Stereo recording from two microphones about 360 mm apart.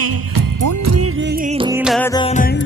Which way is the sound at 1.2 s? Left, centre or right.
Centre.